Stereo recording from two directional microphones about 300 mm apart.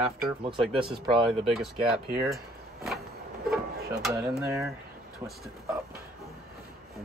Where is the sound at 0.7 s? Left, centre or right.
Centre.